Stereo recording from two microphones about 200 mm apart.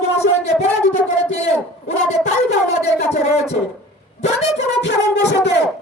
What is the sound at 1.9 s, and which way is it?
Speech, 35° left (ahead or behind).